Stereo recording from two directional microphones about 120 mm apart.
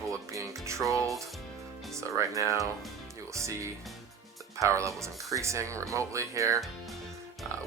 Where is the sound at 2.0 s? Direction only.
25° right (ahead or behind).